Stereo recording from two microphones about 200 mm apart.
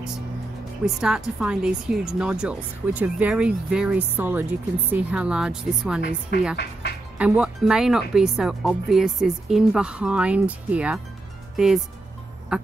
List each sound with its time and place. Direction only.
0.8 s speech: 5° right (ahead or behind)
6.5 s speech: 55° left (ahead or behind)
7.2 s speech: 5° right (ahead or behind)
12.5 s music: 5° right (ahead or behind)